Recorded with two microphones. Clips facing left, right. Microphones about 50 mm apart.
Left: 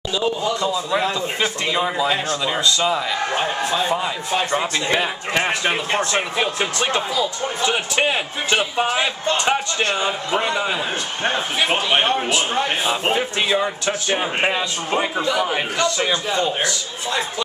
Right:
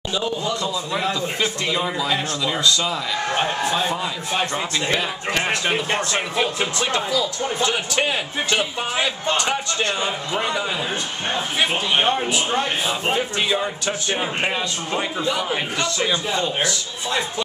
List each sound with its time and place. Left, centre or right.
0.5 s a man's voice: centre
3.3 s a man's voice: centre
4.5 s a man's voice: centre
5.9 s speech: left
6.3 s a man's voice: centre; by 12.0 s left
12.0 s a man's voice: centre
13.1 s a man's voice: centre
16.0 s speech: left